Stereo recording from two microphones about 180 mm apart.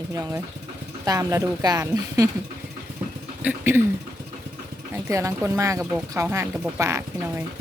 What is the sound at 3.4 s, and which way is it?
Speech, 10° right (ahead or behind).